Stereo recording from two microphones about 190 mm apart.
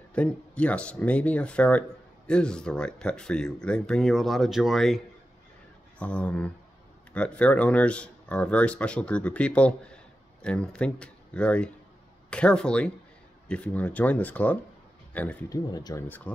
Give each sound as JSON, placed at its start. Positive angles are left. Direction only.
{"t": 0.1, "sound": "speech", "side_deg": 5}
{"t": 15.7, "sound": "speech", "side_deg": 20}
{"t": 16.3, "sound": "speech", "side_deg": 5}